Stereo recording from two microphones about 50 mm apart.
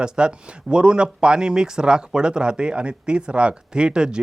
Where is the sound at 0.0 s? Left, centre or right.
Centre.